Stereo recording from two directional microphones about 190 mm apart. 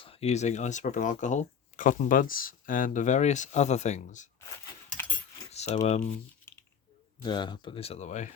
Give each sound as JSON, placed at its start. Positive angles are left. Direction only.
{"t": 0.0, "sound": "speech", "side_deg": 30}
{"t": 5.0, "sound": "keys jangling", "side_deg": 10}
{"t": 5.7, "sound": "speech", "side_deg": 35}
{"t": 7.2, "sound": "speech", "side_deg": 25}